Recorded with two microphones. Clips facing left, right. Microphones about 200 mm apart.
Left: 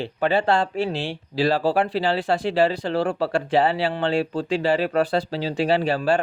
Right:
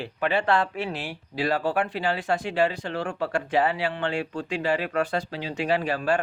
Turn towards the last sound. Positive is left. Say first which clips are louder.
# left 4 dB
turn(degrees=30)  # may be behind; listen again after turning